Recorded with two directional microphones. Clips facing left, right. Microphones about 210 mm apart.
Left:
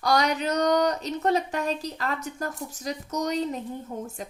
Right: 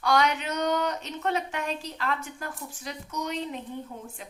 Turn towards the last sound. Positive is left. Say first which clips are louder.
# left 6 dB
turn(degrees=40)  # may be behind; listen again after turning